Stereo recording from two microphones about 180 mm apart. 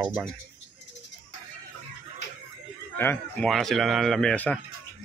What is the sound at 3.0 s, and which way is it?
Speech, 10° left (ahead or behind).